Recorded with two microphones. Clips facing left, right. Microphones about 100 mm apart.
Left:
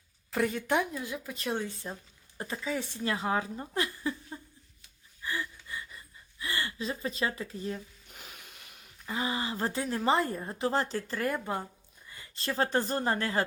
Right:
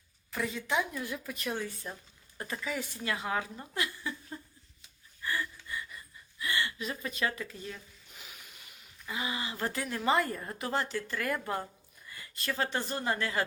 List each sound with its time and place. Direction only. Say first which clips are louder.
0.3 s a woman's voice: left 6 dB; 75° left (ahead or behind)
0.5 s a woman's voice: right 1 dB; 55° left (ahead or behind)
0.9 s a woman's voice: left 1 dB; 20° left (ahead or behind); by 4.1 s 35° left (ahead or behind)
4.3 s a sound: even; 15° left (ahead or behind)
6.4 s speech: even; 35° left (ahead or behind)
8.1 s a sound: left 2 dB; 50° left (ahead or behind)
9.0 s a woman's voice: left 4 dB; 35° left (ahead or behind)
11.3 s speech: left 1 dB; 20° left (ahead or behind); by 13.4 s 35° left (ahead or behind)